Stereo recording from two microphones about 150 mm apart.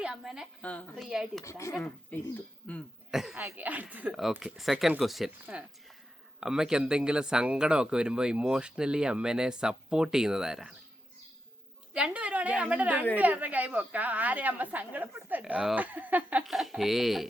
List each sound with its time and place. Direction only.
0.0 s a woman's voice: 5° right (ahead or behind)
0.6 s a woman's voice: 10° left (ahead or behind)
1.0 s speech: 5° right (ahead or behind)
1.5 s speech: 20° left (ahead or behind)
1.7 s a woman's voice: 10° left (ahead or behind)
3.3 s speech: 15° right (ahead or behind)
11.9 s a woman's voice: 10° right (ahead or behind)